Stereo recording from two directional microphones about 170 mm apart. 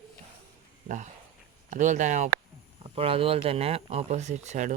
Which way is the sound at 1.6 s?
45° right (ahead or behind).